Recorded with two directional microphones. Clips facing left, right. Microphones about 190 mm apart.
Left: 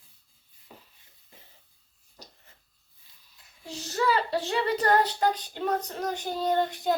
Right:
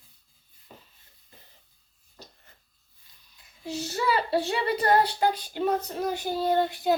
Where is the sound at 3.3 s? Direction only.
5° right (ahead or behind).